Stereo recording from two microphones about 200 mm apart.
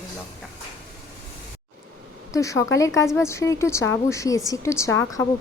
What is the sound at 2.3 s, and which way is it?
A woman's voice, 15° left (ahead or behind).